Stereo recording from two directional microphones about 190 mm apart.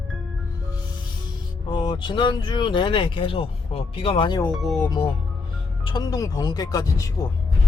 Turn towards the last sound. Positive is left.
turn(degrees=20)  # may be behind; listen again after turning